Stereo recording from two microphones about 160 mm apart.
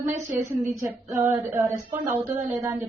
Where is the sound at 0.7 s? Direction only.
20° right (ahead or behind).